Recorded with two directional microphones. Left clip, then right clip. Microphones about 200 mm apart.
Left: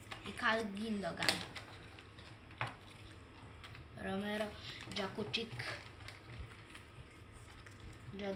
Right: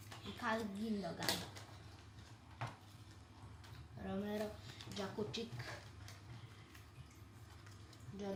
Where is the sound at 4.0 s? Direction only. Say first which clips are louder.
Left 4 dB; 20° left (ahead or behind).